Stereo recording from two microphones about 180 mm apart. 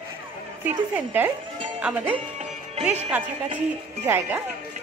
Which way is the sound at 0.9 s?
10° right (ahead or behind).